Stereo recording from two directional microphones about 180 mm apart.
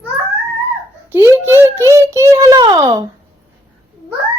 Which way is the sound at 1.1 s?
15° right (ahead or behind).